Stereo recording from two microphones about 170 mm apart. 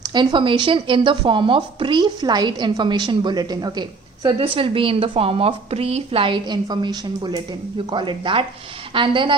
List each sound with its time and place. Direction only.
0.0 s speech: 25° right (ahead or behind)